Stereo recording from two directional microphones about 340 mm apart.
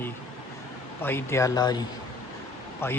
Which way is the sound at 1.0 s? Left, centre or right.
Centre.